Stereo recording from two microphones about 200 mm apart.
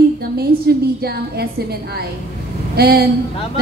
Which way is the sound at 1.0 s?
50° right (ahead or behind).